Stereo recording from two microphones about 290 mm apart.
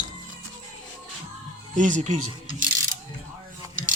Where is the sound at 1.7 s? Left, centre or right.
Right.